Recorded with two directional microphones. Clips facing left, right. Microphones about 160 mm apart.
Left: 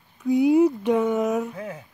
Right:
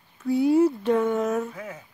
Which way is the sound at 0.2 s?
15° left (ahead or behind).